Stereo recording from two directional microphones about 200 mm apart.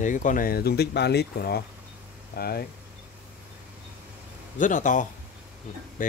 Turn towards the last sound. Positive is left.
turn(degrees=40)  # may be behind; listen again after turning